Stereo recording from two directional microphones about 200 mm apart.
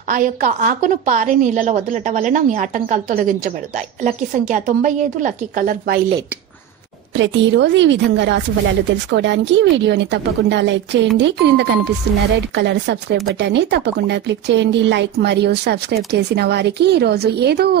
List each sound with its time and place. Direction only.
0.1 s a woman's voice: 40° right (ahead or behind)
7.2 s speech: 65° right (ahead or behind)